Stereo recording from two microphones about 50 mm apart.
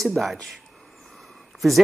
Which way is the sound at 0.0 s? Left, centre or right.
Centre.